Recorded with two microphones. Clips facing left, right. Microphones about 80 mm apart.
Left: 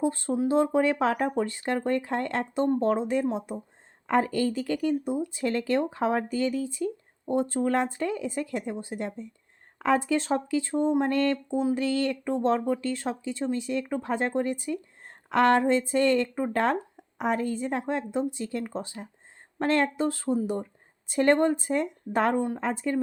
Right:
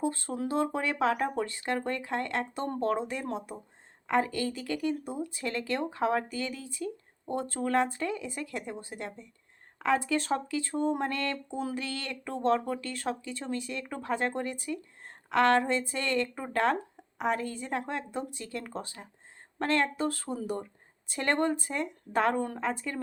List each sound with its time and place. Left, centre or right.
0.0 s speech: left
22.4 s a woman's voice: centre
22.6 s speech: left